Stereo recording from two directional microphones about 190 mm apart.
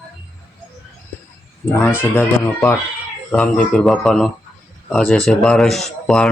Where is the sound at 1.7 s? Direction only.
10° left (ahead or behind).